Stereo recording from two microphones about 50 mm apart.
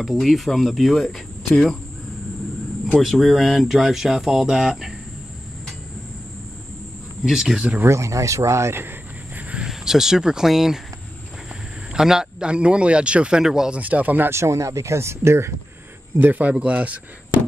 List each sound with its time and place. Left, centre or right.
0.0 s speech: centre
3.0 s speech: centre
7.2 s speech: centre
7.8 s speech: right
9.7 s speech: centre
11.9 s speech: centre
13.4 s speech: centre
13.7 s speech: right
14.3 s speech: right
16.2 s speech: right